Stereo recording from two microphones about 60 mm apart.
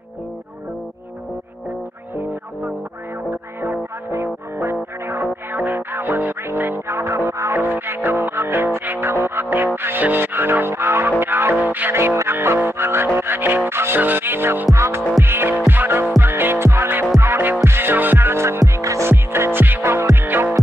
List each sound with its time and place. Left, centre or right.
4.1 s music: right
7.0 s music: right
7.5 s music: right
11.5 s music: right
11.9 s music: right
14.7 s music: right
18.6 s music: right
19.0 s music: right